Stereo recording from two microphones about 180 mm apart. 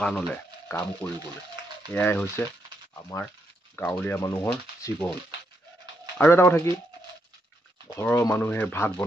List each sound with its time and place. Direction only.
0.0 s speech: 5° left (ahead or behind)
6.1 s speech: 10° left (ahead or behind)
7.9 s speech: 15° left (ahead or behind)